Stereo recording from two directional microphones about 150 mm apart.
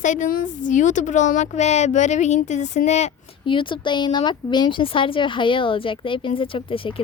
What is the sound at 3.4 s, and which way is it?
Speech, 35° left (ahead or behind).